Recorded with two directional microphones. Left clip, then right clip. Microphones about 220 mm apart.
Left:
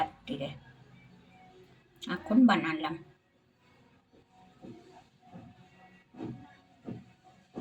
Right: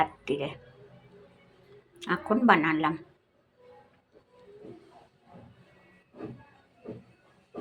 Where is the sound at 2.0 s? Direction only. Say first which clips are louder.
Even; 25° right (ahead or behind).